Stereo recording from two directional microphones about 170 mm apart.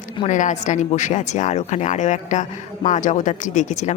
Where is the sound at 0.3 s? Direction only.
45° left (ahead or behind).